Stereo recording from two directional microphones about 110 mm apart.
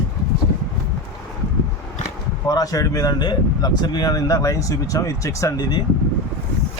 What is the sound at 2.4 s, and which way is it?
Speech, 35° left (ahead or behind).